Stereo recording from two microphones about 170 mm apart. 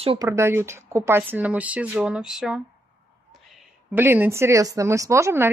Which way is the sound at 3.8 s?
10° right (ahead or behind).